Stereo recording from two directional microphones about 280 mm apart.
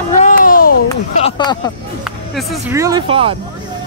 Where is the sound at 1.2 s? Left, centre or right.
Centre.